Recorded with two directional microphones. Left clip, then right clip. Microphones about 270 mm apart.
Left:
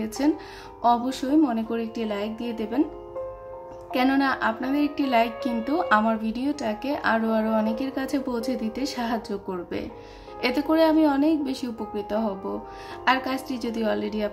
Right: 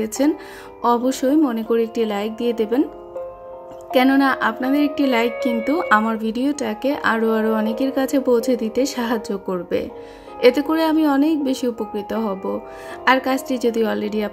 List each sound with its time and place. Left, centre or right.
0.2 s speech: right
3.9 s speech: right